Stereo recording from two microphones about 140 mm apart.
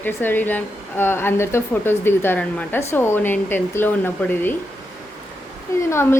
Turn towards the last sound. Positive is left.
turn(degrees=20)  # may be behind; listen again after turning